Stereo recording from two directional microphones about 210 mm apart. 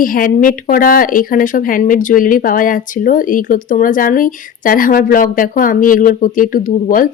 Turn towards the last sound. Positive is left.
turn(degrees=40)  # may be behind; listen again after turning